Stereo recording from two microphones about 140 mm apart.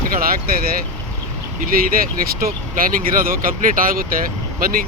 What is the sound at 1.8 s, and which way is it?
Speech, 90° right.